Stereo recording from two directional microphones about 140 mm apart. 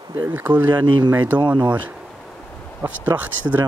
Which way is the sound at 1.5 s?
10° right (ahead or behind).